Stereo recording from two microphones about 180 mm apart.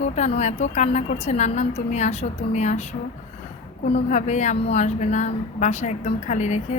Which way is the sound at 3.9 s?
40° left (ahead or behind).